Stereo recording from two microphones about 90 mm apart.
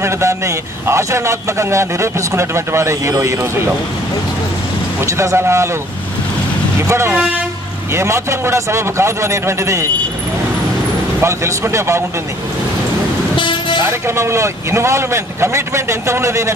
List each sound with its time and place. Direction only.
0.0 s a man's voice: 35° right (ahead or behind)
5.0 s a man's voice: 35° right (ahead or behind)
6.9 s a man's voice: 30° right (ahead or behind)
11.1 s a man's voice: 30° right (ahead or behind)
13.4 s vehicle: 65° left (ahead or behind)
13.8 s a man's voice: 30° right (ahead or behind)